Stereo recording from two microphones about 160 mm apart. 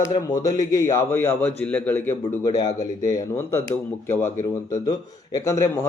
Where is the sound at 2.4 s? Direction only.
25° left (ahead or behind).